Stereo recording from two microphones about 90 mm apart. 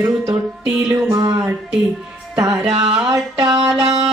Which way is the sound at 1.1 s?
35° right (ahead or behind).